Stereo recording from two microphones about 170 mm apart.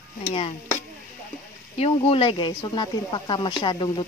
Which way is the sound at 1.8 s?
35° left (ahead or behind).